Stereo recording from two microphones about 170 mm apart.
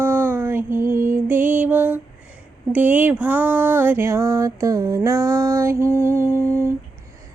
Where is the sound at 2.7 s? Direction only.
10° right (ahead or behind).